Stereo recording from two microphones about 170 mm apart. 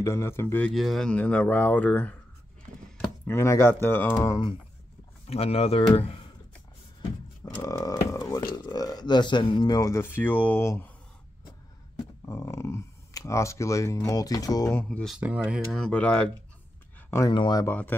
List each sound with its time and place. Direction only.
0.0 s a man's voice: 15° left (ahead or behind)
3.3 s a man's voice: 15° left (ahead or behind)
5.2 s speech: 35° left (ahead or behind)
7.0 s speech: 20° left (ahead or behind)
12.3 s speech: 15° left (ahead or behind)
14.9 s speech: centre (ahead or behind)
17.3 s speech: 25° left (ahead or behind)
17.6 s a man's voice: 10° left (ahead or behind)